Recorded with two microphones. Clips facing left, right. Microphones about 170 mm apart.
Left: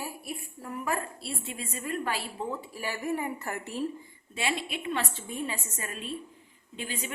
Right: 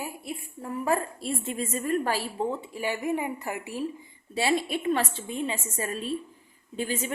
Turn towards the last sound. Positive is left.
turn(degrees=-40)  # may be behind; listen again after turning